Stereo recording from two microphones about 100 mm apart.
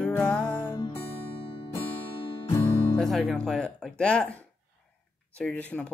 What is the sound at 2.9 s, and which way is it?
Music, 5° left (ahead or behind).